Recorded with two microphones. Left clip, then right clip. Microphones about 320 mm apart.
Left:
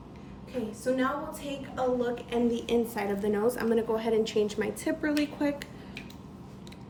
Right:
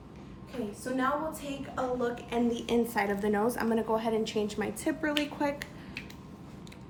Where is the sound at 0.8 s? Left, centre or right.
Centre.